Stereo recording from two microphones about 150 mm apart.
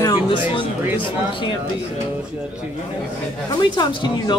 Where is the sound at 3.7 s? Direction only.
30° left (ahead or behind).